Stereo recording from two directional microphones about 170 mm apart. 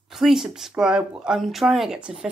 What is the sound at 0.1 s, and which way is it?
Speech, centre (ahead or behind).